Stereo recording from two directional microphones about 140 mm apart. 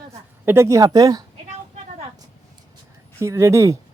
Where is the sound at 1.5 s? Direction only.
50° right (ahead or behind).